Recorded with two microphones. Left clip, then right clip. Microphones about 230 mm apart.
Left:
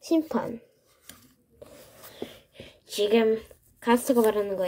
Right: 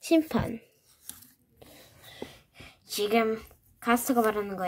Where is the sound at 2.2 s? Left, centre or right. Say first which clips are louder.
Left 4 dB; centre.